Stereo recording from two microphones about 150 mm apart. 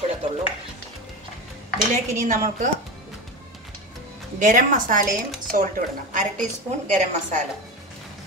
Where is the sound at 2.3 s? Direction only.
55° right (ahead or behind).